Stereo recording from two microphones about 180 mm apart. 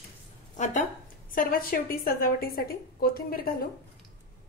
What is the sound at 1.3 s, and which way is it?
A woman's voice, 50° left (ahead or behind).